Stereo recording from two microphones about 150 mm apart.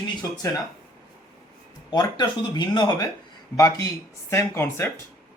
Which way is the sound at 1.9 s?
30° left (ahead or behind).